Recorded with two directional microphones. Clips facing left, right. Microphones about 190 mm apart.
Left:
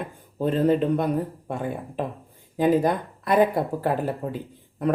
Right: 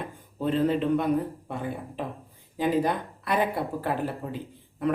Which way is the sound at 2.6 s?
45° left (ahead or behind).